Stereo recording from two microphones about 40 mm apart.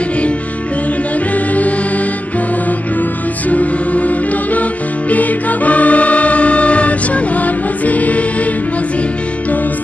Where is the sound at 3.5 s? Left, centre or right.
Left.